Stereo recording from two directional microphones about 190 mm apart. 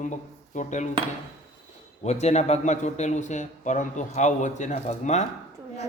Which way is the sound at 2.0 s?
35° left (ahead or behind).